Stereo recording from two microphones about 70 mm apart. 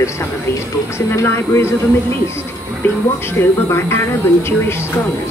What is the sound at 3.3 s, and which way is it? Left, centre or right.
Speech, left.